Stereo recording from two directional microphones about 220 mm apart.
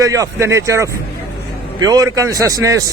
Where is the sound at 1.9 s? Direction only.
15° right (ahead or behind).